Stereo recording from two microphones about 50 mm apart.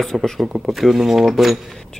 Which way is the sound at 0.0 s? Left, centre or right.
Centre.